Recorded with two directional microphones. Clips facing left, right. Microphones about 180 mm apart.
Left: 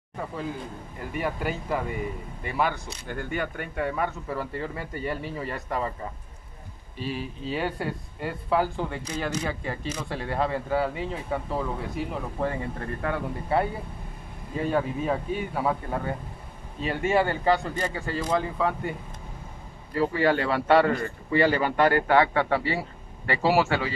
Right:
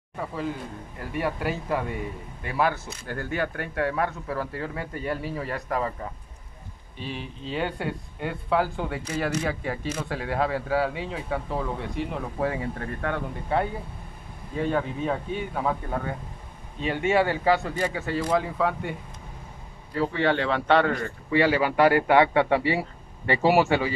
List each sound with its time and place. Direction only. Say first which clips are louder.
0.9 s speech: right 1 dB; centre (ahead or behind)
7.0 s a man's voice: left 3 dB; 5° left (ahead or behind); by 24.0 s 15° right (ahead or behind)